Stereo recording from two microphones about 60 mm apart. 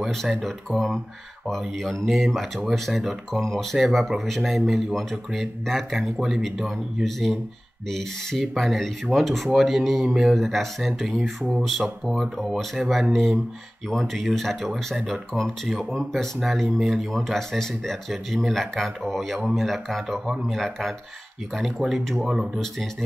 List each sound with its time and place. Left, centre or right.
0.1 s speech: centre